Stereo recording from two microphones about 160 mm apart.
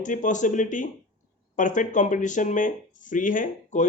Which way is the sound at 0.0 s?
50° left (ahead or behind).